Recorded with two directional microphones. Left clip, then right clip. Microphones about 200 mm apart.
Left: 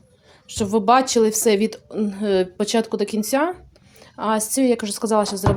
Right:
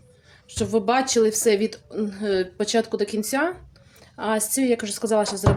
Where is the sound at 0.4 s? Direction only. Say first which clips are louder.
Left 4 dB; 20° left (ahead or behind).